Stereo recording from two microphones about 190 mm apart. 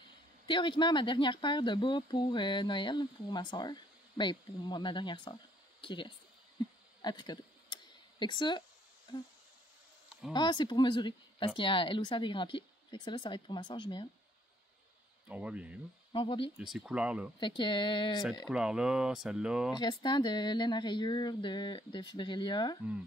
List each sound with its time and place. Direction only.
0.5 s speech: 25° left (ahead or behind)
7.0 s a sound: 20° left (ahead or behind)
10.3 s speech: 25° left (ahead or behind)
15.2 s speech: 5° right (ahead or behind)
16.1 s speech: 25° left (ahead or behind)
16.5 s speech: 5° right (ahead or behind)
17.4 s speech: 25° left (ahead or behind)
18.5 s speech: 5° right (ahead or behind)
19.7 s speech: 20° left (ahead or behind)